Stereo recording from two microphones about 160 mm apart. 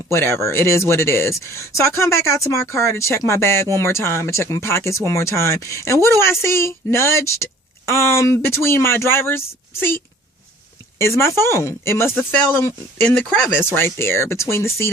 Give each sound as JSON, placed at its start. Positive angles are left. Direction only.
{"t": 0.1, "sound": "speech", "side_deg": 15}
{"t": 11.0, "sound": "speech", "side_deg": 15}